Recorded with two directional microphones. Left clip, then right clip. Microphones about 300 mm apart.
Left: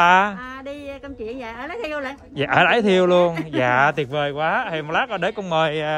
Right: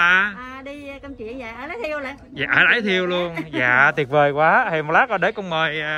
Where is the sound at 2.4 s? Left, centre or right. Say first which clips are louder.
Even; centre.